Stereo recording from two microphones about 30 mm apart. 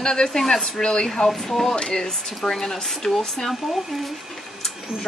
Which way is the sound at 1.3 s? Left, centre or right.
Centre.